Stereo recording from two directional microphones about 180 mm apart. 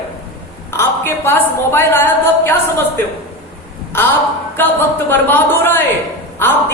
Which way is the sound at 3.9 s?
10° left (ahead or behind).